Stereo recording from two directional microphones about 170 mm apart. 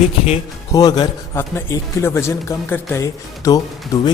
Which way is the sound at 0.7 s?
25° left (ahead or behind).